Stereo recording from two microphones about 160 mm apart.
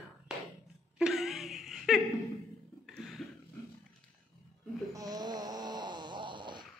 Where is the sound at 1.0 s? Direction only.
Centre (ahead or behind).